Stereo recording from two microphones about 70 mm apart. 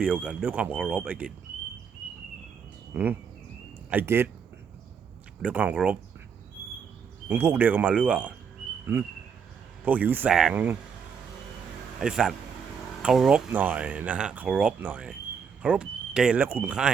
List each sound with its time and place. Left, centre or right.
0.0 s speech: centre
2.9 s speech: right
4.0 s speech: right
5.4 s speech: centre
7.3 s speech: right
8.9 s speech: right
9.8 s speech: right
10.2 s speech: centre
10.5 s speech: right
11.9 s speech: centre
13.5 s speech: right
16.4 s speech: right